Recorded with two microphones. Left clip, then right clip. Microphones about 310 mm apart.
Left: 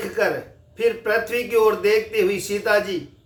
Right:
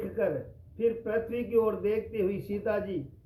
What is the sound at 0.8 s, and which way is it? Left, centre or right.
A man's voice, centre.